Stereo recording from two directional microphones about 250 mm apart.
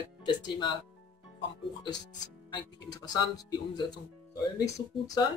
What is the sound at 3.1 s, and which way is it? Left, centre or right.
Speech, centre.